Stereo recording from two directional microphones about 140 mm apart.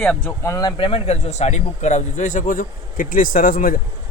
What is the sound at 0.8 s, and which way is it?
A man's voice, 40° left (ahead or behind).